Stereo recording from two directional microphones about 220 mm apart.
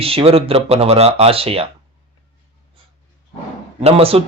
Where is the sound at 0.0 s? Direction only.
25° right (ahead or behind).